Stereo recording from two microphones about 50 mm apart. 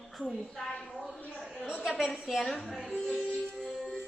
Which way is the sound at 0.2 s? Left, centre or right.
Centre.